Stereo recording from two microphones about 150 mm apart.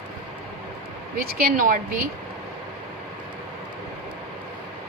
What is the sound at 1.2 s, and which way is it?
Speech, 85° right.